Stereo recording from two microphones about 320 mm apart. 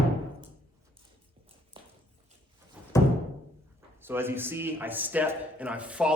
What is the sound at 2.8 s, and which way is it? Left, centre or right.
Music, centre.